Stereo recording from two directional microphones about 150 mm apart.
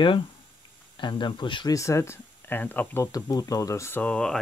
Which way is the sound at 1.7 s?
20° left (ahead or behind).